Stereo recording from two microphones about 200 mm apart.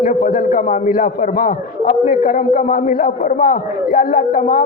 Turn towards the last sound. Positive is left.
turn(degrees=45)  # may be behind; listen again after turning